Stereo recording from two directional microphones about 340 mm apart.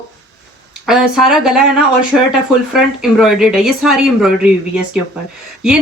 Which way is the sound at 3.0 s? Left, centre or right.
Centre.